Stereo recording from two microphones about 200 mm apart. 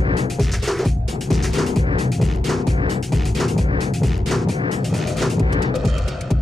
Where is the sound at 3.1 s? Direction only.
Centre (ahead or behind).